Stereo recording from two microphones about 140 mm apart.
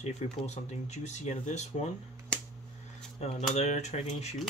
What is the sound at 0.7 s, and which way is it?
Speech, 55° left (ahead or behind).